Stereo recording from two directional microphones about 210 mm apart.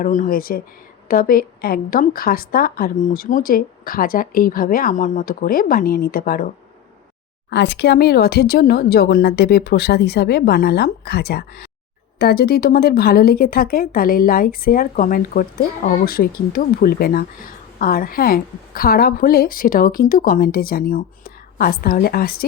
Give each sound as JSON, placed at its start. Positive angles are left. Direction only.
{"t": 0.0, "sound": "speech", "side_deg": 40}
{"t": 7.5, "sound": "speech", "side_deg": 55}